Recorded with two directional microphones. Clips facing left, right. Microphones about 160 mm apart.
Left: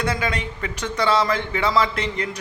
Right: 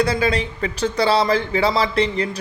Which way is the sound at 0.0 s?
30° right (ahead or behind).